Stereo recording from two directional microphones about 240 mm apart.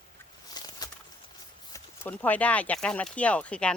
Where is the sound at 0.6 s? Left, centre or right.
Centre.